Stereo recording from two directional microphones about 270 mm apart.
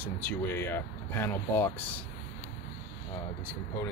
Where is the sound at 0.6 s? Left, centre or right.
Centre.